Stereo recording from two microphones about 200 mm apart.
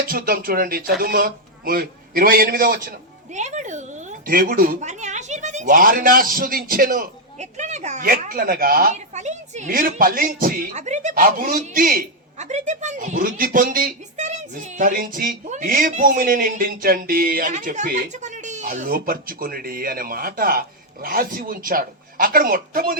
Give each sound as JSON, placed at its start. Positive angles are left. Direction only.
{"t": 0.1, "sound": "speech", "side_deg": -45}
{"t": 3.3, "sound": "speech", "side_deg": -35}